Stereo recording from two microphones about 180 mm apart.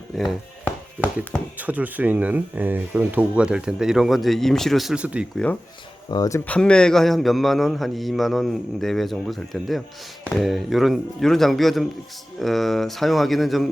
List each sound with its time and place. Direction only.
0.2 s speech: centre (ahead or behind)
1.5 s speech: 10° right (ahead or behind)
6.1 s speech: 20° left (ahead or behind)
6.5 s a man's voice: 5° left (ahead or behind)